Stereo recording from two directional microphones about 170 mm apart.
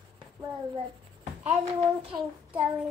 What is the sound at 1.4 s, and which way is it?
Child singing, 35° right (ahead or behind).